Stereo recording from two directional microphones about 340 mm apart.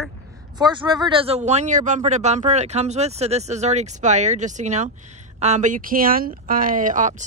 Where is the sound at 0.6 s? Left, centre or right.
Centre.